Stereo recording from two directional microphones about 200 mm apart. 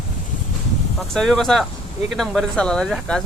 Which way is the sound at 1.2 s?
Centre (ahead or behind).